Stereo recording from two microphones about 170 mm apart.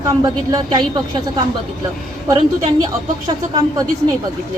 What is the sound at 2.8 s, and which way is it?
A woman's voice, 25° right (ahead or behind).